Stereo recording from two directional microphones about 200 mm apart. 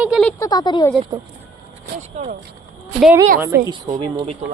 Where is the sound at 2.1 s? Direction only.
35° right (ahead or behind).